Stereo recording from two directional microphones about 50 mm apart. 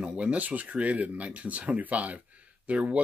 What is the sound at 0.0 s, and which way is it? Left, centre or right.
Speech, right.